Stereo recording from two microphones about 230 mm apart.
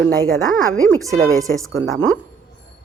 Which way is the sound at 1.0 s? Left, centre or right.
Centre.